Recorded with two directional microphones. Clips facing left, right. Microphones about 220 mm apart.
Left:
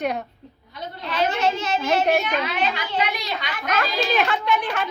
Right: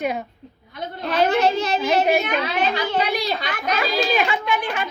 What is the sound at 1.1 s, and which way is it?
A child's voice, 40° right (ahead or behind).